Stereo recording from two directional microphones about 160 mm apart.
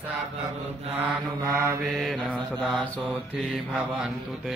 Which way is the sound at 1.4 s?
15° right (ahead or behind).